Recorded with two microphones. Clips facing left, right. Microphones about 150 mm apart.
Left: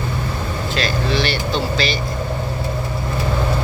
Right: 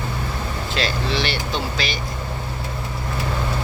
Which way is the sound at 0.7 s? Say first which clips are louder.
Left 3 dB; 25° right (ahead or behind).